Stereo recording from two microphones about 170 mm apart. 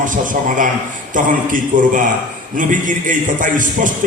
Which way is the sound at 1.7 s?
50° right (ahead or behind).